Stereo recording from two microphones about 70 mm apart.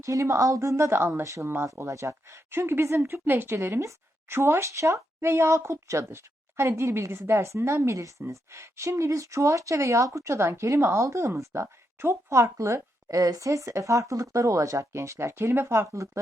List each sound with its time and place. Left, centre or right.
0.0 s speech: right
1.2 s speech: right
4.4 s speech: right